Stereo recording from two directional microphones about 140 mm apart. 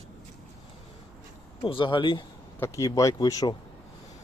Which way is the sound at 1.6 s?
35° left (ahead or behind).